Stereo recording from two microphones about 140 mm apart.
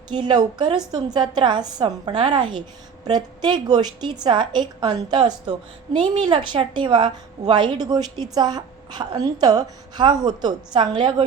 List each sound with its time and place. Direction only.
0.1 s a woman's voice: 30° right (ahead or behind)